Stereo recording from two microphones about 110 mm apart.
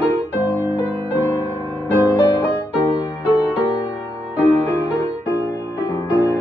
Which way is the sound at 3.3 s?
10° right (ahead or behind).